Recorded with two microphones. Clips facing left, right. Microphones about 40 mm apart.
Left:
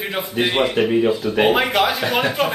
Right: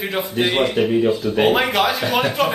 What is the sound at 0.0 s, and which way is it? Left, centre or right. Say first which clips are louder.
Speech: right 1 dB; centre.